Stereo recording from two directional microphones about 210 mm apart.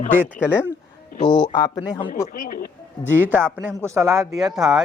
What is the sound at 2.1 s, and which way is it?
Speech, 40° left (ahead or behind).